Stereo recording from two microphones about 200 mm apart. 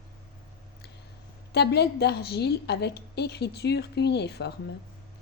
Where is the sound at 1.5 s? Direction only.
55° left (ahead or behind).